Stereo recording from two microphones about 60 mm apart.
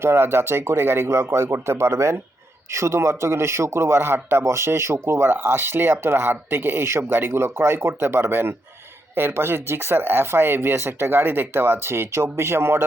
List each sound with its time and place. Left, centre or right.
0.0 s speech: right